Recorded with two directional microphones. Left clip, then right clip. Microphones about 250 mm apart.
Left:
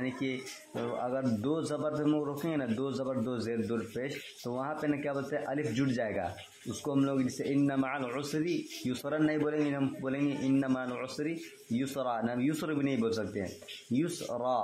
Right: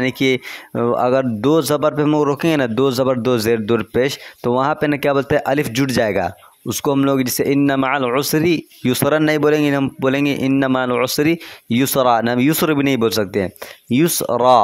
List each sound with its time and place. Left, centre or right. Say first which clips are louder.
0.0 s speech: right 18 dB; right